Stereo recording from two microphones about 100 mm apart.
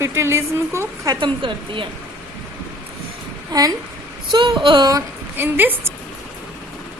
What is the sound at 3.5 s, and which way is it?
A woman's voice, 40° right (ahead or behind).